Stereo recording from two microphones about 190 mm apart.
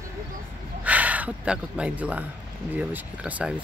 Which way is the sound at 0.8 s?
10° right (ahead or behind).